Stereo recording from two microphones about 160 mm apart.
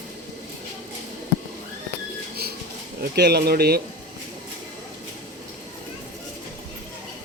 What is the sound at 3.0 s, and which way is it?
Speech, 85° right.